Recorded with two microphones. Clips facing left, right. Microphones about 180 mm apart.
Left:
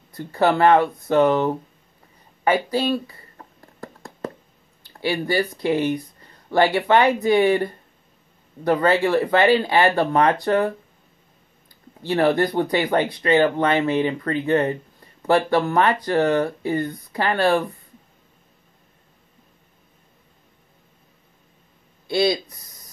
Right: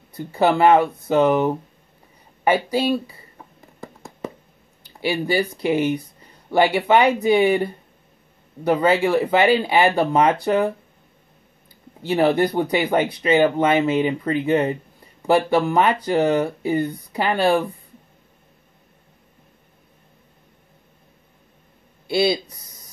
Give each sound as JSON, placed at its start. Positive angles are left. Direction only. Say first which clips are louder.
{"t": 0.2, "sound": "speech", "louder": "right 1 dB", "side_deg": -5}
{"t": 2.4, "sound": "a sound", "louder": "right 1 dB", "side_deg": -10}
{"t": 5.1, "sound": "speech", "louder": "right 1 dB", "side_deg": -15}
{"t": 12.2, "sound": "speech", "louder": "right 1 dB", "side_deg": -5}
{"t": 22.1, "sound": "speech", "louder": "right 1 dB", "side_deg": -5}